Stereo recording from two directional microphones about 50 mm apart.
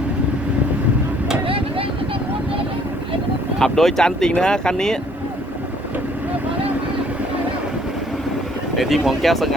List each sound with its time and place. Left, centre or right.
3.6 s speech: centre
8.7 s speech: centre